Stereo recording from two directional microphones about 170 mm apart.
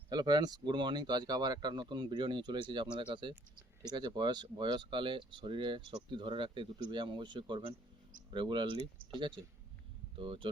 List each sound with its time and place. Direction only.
0.1 s speech: 25° right (ahead or behind)
10.2 s speech: 30° right (ahead or behind)